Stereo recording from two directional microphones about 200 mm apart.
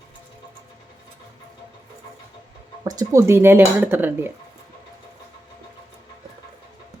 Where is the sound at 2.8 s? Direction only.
20° right (ahead or behind).